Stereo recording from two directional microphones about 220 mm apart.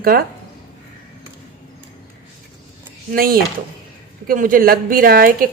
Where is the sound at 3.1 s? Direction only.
40° right (ahead or behind).